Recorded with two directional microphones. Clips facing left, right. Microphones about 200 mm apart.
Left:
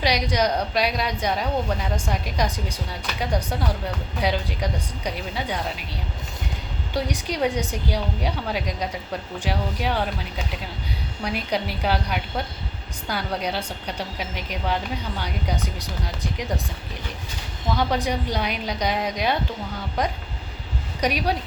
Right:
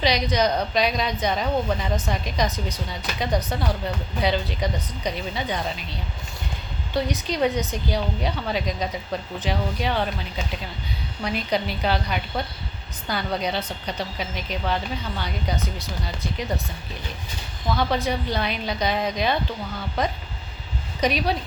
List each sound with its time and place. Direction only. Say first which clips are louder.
0.0 s a woman's voice: right 1 dB; 10° left (ahead or behind)
6.9 s a woman's voice: right 1 dB; 10° left (ahead or behind)
17.7 s a woman's voice: even; 15° left (ahead or behind)